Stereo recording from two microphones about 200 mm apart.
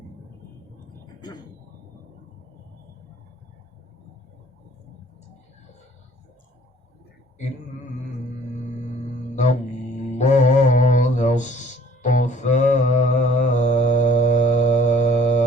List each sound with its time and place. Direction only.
10.2 s music: 35° left (ahead or behind)
12.0 s mantra: 35° left (ahead or behind)